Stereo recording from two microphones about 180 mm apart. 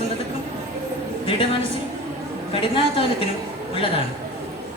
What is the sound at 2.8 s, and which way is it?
Speech, 30° left (ahead or behind).